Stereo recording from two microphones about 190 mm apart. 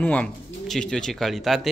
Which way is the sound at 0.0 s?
5° left (ahead or behind).